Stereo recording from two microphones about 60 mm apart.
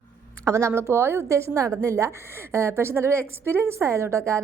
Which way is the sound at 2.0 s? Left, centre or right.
Right.